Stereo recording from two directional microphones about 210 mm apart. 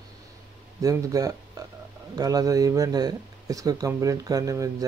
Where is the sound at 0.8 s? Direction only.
15° right (ahead or behind).